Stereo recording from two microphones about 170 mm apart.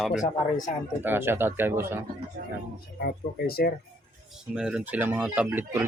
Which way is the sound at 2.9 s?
65° left (ahead or behind).